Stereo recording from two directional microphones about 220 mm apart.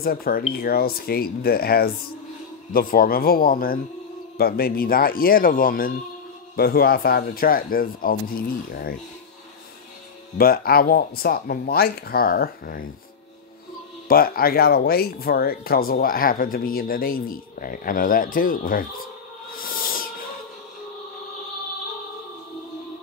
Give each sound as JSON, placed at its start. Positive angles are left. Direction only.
{"t": 0.0, "sound": "speech", "side_deg": 40}
{"t": 10.3, "sound": "speech", "side_deg": 40}
{"t": 14.0, "sound": "speech", "side_deg": 40}
{"t": 19.5, "sound": "owl", "side_deg": 40}